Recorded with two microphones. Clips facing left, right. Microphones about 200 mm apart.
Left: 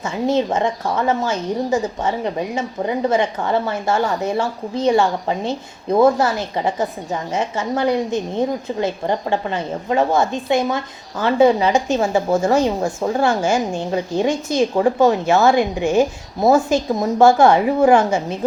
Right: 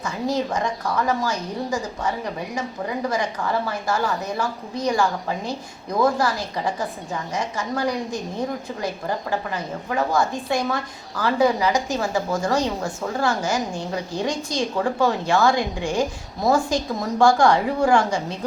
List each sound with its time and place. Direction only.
0.0 s a woman's voice: 25° left (ahead or behind)